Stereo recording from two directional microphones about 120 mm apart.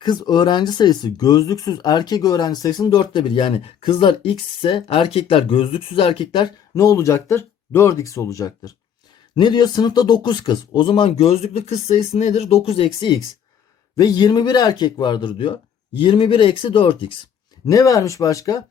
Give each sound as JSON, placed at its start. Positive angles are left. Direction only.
{"t": 0.0, "sound": "speech", "side_deg": 35}
{"t": 6.7, "sound": "speech", "side_deg": 25}
{"t": 13.9, "sound": "speech", "side_deg": 30}
{"t": 17.7, "sound": "speech", "side_deg": 30}